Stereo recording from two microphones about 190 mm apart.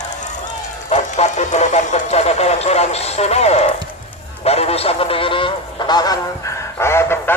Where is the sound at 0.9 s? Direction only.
35° left (ahead or behind).